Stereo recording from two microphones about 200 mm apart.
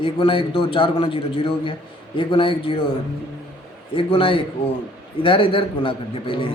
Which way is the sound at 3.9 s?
25° left (ahead or behind).